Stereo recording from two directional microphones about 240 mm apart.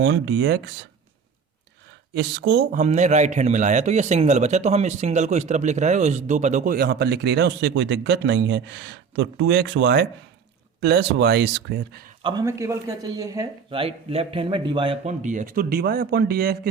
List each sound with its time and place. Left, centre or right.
0.0 s speech: right
2.1 s speech: right
2.7 s a man's voice: right
12.2 s a man's voice: centre; by 16.6 s right